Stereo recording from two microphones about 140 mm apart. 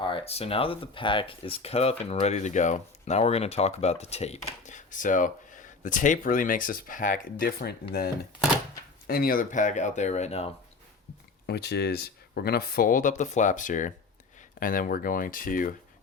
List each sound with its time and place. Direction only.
0.0 s speech: 40° left (ahead or behind); by 7.7 s 90° left
9.0 s speech: 90° left; by 10.5 s 50° left (ahead or behind)
11.8 s speech: 90° left; by 13.9 s 65° left (ahead or behind)
14.6 s speech: 80° left